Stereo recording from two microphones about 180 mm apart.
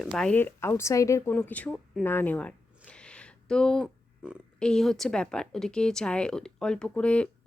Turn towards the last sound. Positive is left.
turn(degrees=5)  # may be behind; listen again after turning